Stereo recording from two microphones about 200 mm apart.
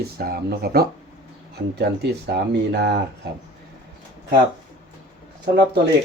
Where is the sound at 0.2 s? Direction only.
50° right (ahead or behind).